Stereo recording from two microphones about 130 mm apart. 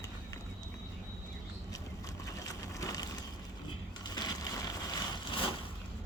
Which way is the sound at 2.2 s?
25° left (ahead or behind).